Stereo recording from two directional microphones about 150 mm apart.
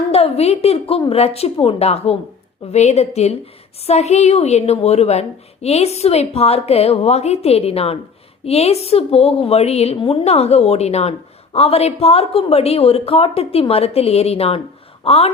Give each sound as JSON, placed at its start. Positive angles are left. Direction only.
{"t": 0.1, "sound": "a woman's voice", "side_deg": 45}